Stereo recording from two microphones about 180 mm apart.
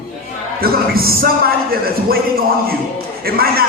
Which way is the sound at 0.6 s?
55° right (ahead or behind).